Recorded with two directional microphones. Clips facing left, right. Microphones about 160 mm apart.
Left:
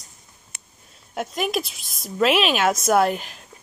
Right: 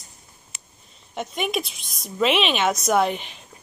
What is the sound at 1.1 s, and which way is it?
A woman's voice, 5° left (ahead or behind).